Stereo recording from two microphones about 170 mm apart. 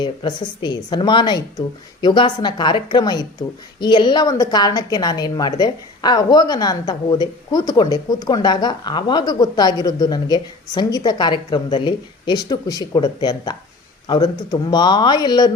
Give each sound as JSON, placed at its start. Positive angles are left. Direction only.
{"t": 0.0, "sound": "a woman's voice", "side_deg": 25}